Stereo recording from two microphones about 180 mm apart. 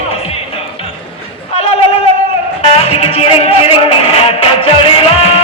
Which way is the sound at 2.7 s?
35° left (ahead or behind).